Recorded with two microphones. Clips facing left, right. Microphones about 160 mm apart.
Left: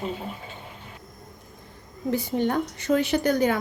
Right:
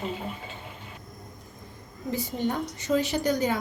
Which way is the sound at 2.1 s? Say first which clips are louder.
Left 4 dB; 60° left (ahead or behind).